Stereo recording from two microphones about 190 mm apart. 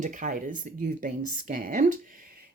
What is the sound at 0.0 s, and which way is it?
Speech, 45° right (ahead or behind).